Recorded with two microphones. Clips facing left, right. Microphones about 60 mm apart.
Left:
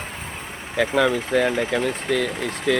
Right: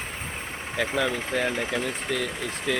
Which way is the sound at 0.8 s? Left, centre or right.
Left.